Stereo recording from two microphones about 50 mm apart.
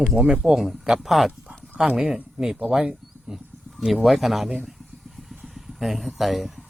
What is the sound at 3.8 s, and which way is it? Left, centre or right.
Speech, centre.